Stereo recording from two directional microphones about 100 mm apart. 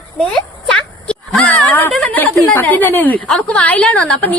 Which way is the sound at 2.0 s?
15° left (ahead or behind).